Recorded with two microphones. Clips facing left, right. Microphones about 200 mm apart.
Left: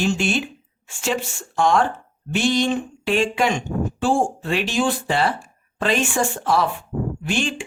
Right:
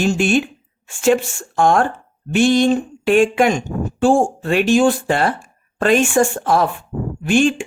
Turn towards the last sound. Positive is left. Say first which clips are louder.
# right 8 dB
turn(degrees=-50)  # may be behind; listen again after turning